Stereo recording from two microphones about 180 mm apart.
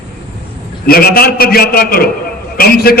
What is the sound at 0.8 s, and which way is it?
A man's voice, 55° left (ahead or behind).